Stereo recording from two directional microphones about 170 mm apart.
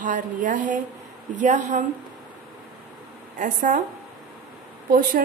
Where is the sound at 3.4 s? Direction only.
50° right (ahead or behind).